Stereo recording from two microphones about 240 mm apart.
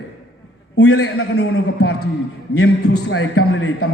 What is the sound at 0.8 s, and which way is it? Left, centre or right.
A man's voice, left.